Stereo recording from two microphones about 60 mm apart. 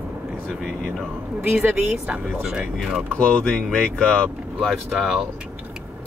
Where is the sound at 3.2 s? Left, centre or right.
Centre.